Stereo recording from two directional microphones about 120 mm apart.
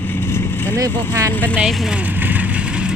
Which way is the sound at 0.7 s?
30° right (ahead or behind).